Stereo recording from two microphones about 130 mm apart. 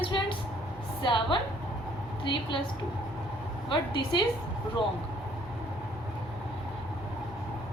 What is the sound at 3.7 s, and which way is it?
Speech, 40° left (ahead or behind).